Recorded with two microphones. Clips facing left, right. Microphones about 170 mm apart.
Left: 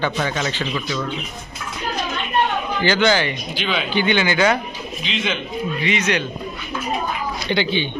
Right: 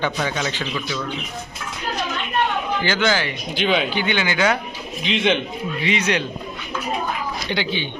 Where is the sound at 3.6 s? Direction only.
50° right (ahead or behind).